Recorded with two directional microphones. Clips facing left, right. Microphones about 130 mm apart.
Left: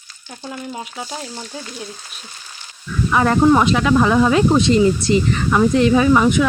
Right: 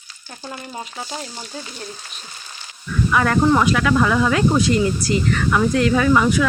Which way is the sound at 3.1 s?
25° left (ahead or behind).